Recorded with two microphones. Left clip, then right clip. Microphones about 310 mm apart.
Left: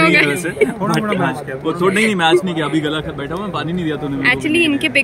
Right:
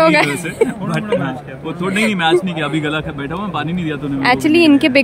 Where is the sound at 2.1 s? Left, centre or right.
Centre.